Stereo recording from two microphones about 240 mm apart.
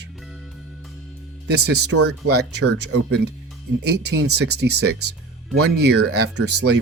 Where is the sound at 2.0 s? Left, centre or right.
Right.